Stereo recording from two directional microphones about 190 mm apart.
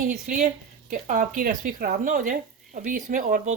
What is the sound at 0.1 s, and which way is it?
A woman's voice, 40° right (ahead or behind).